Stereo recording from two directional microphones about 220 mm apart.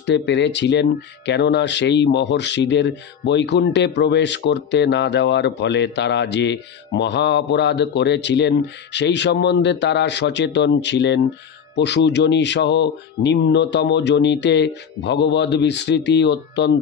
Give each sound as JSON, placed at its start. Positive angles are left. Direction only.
{"t": 0.0, "sound": "speech", "side_deg": 50}